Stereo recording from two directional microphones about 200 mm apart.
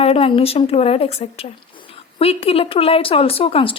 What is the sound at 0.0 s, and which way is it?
Speech, 30° left (ahead or behind).